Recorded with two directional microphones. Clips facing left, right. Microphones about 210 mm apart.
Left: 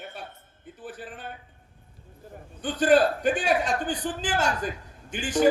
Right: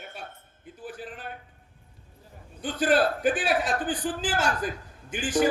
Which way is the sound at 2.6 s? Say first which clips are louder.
Left 3 dB; centre (ahead or behind).